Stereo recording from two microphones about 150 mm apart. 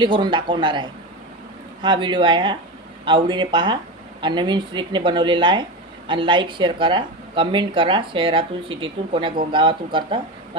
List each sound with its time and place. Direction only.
0.0 s speech: 30° right (ahead or behind)